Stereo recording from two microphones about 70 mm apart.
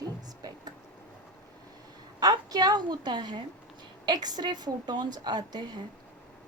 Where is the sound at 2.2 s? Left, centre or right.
Right.